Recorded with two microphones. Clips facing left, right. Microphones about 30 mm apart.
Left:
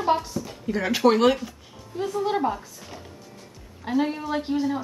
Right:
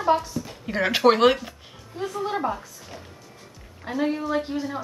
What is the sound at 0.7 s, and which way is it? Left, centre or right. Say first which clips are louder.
Speech: right 1 dB; right.